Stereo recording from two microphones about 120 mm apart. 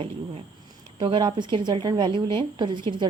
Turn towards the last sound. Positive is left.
turn(degrees=-40)  # may be behind; listen again after turning